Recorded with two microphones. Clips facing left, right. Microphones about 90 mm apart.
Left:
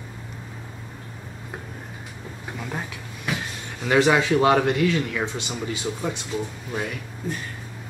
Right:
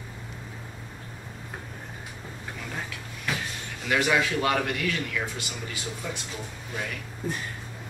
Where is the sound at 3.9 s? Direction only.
30° left (ahead or behind).